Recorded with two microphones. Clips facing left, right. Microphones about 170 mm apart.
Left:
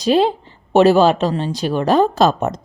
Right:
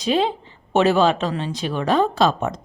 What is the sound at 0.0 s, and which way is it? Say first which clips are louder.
A woman's voice: left 5 dB; 40° left (ahead or behind).